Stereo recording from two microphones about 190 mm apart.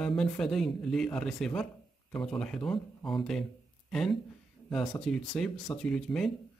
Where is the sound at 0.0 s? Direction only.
5° left (ahead or behind).